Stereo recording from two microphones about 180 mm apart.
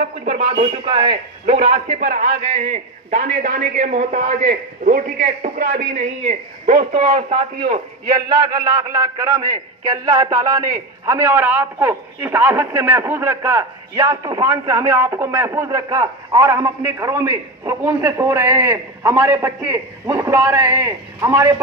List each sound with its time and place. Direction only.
0.0 s a man's voice: 45° right (ahead or behind)
0.5 s a man's voice: 30° right (ahead or behind)
8.5 s a man's voice: 20° right (ahead or behind)